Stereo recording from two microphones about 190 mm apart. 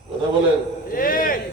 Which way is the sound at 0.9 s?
45° left (ahead or behind).